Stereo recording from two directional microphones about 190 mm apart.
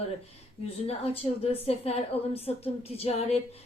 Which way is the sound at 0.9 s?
30° left (ahead or behind).